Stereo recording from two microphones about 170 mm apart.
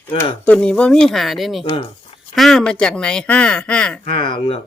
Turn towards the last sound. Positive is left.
turn(degrees=30)  # may be behind; listen again after turning